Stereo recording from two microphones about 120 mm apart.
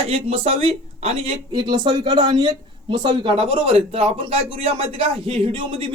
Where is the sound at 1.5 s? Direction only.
40° right (ahead or behind).